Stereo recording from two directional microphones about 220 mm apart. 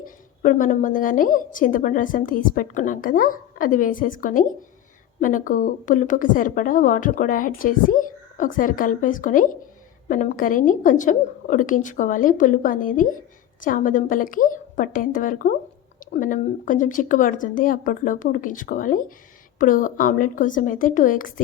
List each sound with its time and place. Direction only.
0.0 s a woman's voice: 35° left (ahead or behind)